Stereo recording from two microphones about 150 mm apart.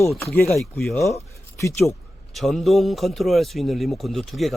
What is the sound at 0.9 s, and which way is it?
Speech, 20° left (ahead or behind).